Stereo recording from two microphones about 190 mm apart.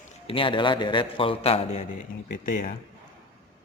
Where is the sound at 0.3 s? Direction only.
25° left (ahead or behind).